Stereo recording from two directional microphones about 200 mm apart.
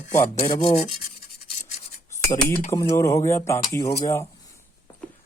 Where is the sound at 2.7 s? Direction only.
15° left (ahead or behind).